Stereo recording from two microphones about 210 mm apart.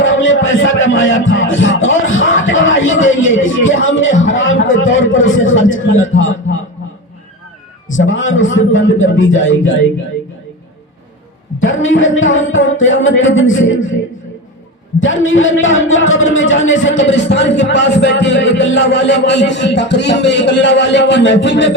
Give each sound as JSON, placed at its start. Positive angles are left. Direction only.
{"t": 0.0, "sound": "music", "side_deg": 65}
{"t": 7.9, "sound": "a man's voice", "side_deg": 65}
{"t": 11.6, "sound": "a man's voice", "side_deg": 65}